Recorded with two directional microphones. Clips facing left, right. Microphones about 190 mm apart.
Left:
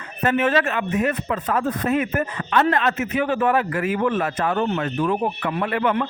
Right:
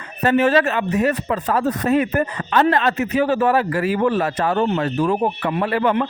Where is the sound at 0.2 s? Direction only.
35° right (ahead or behind).